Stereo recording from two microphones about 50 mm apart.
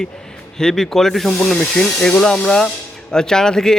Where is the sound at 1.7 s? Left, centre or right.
Centre.